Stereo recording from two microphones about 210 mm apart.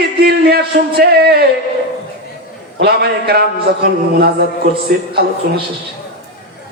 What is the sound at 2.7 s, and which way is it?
Speech, 50° right (ahead or behind).